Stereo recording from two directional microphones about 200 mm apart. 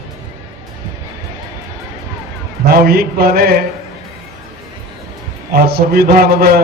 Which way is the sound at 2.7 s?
50° right (ahead or behind).